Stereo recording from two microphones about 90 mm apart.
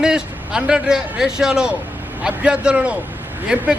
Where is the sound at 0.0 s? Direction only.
10° right (ahead or behind).